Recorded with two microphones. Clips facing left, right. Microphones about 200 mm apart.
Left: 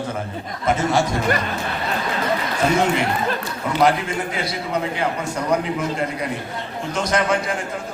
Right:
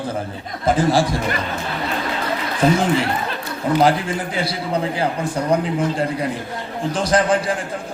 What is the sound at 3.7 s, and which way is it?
A man's voice, 30° right (ahead or behind).